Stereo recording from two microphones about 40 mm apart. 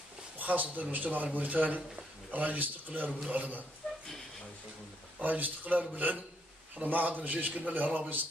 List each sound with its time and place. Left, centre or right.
0.4 s a man's voice: right
3.8 s a sound: left
5.2 s a man's voice: right